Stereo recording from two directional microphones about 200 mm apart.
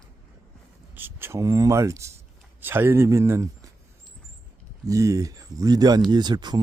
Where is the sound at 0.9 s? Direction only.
10° right (ahead or behind).